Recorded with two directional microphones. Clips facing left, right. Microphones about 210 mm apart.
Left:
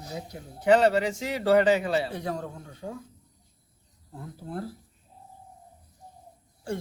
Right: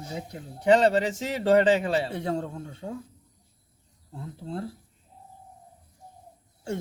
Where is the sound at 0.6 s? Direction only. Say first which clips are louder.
Even; 30° right (ahead or behind).